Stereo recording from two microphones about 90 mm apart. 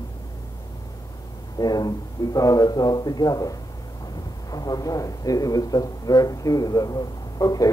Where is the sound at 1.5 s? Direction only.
45° left (ahead or behind).